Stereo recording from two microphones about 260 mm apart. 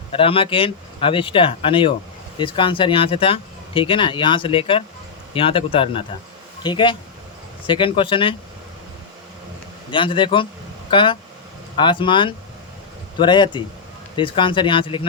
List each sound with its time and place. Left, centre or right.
0.1 s speech: left
9.9 s speech: centre